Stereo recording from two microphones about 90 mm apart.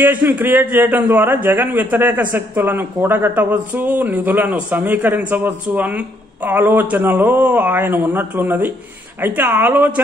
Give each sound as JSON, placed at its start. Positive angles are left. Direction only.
{"t": 0.0, "sound": "a man's voice", "side_deg": -20}